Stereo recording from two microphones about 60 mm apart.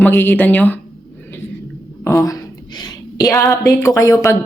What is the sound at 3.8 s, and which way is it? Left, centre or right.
Speech, left.